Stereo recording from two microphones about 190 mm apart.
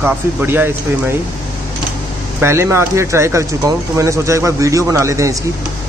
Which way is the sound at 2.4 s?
15° right (ahead or behind).